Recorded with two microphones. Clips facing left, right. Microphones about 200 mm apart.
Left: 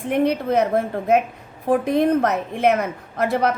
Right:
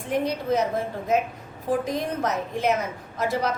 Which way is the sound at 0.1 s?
60° left (ahead or behind).